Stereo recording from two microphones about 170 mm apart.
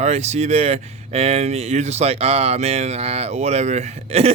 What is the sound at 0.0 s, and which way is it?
Speech, 40° right (ahead or behind).